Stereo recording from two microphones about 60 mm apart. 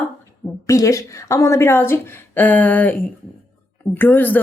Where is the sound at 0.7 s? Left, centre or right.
Left.